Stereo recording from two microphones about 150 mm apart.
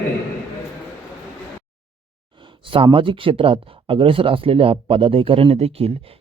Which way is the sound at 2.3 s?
35° right (ahead or behind).